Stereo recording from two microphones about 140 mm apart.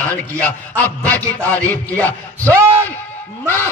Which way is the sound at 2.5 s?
20° right (ahead or behind).